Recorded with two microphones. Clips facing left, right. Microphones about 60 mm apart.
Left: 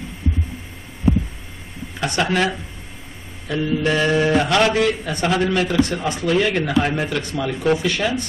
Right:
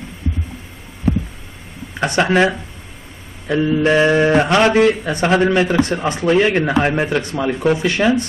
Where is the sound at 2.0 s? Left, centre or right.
Right.